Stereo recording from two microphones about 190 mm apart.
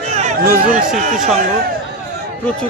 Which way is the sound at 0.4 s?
55° right (ahead or behind).